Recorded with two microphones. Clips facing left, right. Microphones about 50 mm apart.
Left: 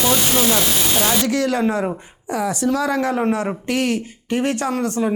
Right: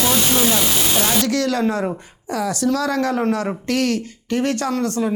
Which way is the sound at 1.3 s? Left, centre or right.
Left.